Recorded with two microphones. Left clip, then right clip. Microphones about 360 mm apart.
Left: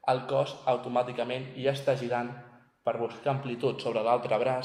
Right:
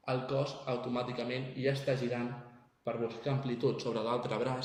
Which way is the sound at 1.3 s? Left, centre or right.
Left.